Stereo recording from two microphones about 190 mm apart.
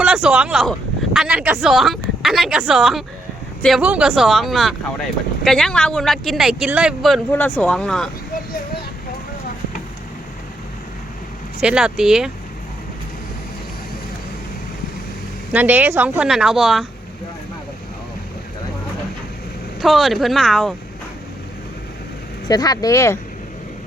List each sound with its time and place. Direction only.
0.0 s speech: 5° right (ahead or behind)
7.3 s speech: 10° left (ahead or behind)
11.6 s speech: 5° right (ahead or behind)
15.5 s speech: 10° right (ahead or behind)
19.8 s speech: centre (ahead or behind)
22.4 s speech: 20° left (ahead or behind)